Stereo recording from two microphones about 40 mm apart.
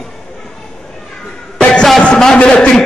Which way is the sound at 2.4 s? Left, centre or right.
Left.